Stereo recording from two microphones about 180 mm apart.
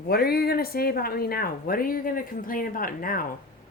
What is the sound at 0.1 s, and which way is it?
Speech, 60° left (ahead or behind).